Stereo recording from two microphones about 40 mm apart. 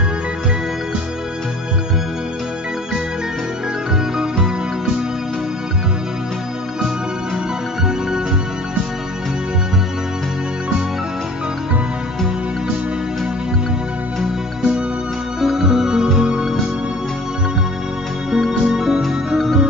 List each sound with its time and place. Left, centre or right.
15.4 s music: centre
18.3 s music: centre